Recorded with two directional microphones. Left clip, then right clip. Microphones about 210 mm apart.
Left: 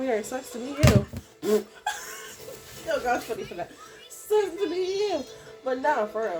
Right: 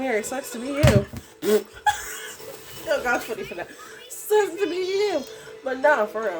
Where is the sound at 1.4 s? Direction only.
35° right (ahead or behind).